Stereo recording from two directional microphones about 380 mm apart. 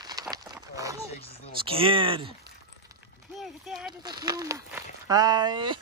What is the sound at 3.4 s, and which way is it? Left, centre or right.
Speech, centre.